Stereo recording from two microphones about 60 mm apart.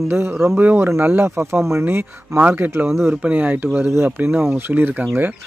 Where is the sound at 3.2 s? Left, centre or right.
Right.